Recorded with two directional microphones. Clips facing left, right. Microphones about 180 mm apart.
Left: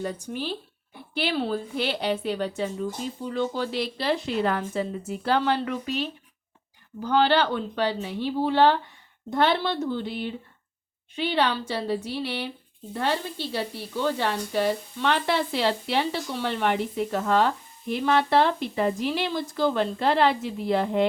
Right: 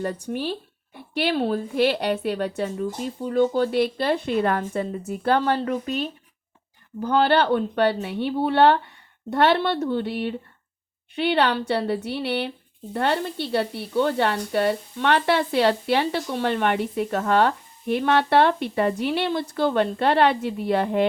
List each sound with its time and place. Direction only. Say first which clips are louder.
0.0 s speech: right 4 dB; 60° right (ahead or behind)
3.2 s a woman's voice: right 8 dB; 50° right (ahead or behind)